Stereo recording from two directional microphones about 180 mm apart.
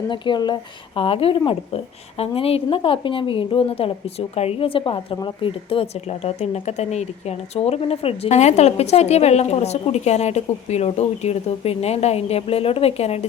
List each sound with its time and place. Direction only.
0.1 s a woman's voice: 25° left (ahead or behind)